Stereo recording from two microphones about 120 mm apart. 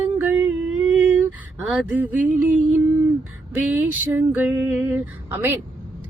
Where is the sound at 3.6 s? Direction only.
15° right (ahead or behind).